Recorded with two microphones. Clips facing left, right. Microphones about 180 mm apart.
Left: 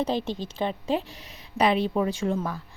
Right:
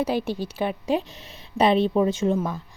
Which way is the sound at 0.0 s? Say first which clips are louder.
Right 2 dB; 10° right (ahead or behind).